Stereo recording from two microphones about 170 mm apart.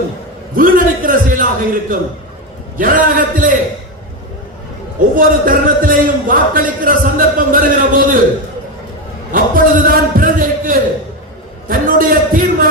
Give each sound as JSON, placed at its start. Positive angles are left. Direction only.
{"t": 0.5, "sound": "a sound", "side_deg": -55}
{"t": 2.7, "sound": "a man's voice", "side_deg": -50}
{"t": 4.9, "sound": "a man's voice", "side_deg": -55}
{"t": 9.3, "sound": "a man's voice", "side_deg": -55}